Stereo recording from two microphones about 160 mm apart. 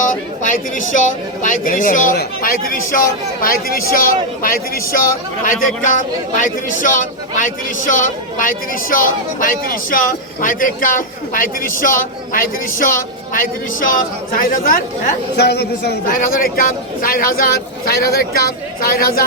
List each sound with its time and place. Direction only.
0.0 s a man's voice: 55° left (ahead or behind)
5.5 s a man's voice: 55° left (ahead or behind)
15.4 s a man's voice: 90° left; by 19.2 s 65° left (ahead or behind)